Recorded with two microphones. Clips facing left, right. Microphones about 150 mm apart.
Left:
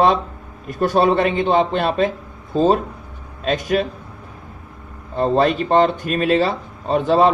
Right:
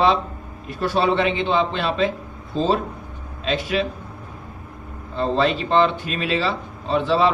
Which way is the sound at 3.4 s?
45° left (ahead or behind).